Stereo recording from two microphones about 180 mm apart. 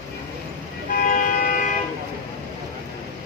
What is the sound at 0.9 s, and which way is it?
Vehicle, 50° left (ahead or behind).